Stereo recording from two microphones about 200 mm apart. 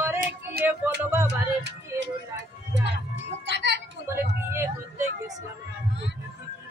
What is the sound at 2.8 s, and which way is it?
Music, 60° right (ahead or behind).